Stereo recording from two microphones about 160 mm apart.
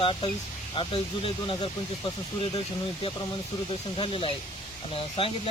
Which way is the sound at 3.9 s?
35° left (ahead or behind).